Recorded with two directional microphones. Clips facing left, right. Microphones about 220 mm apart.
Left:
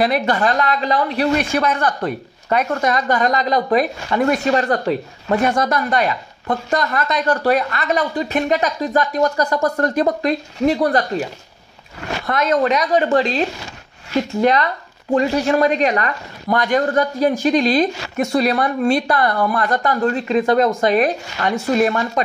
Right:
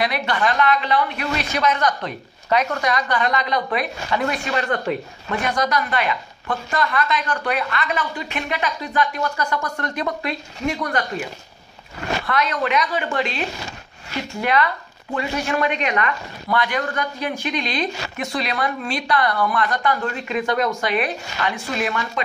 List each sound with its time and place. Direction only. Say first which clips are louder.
0.0 s speech: left 5 dB; 35° left (ahead or behind)
1.3 s speech: left 4 dB; 50° left (ahead or behind); by 5.8 s 30° left (ahead or behind)
5.8 s speech: left 4 dB; 40° left (ahead or behind)
12.3 s speech: left 7 dB; 45° left (ahead or behind)
14.4 s speech: left 2 dB; 40° left (ahead or behind)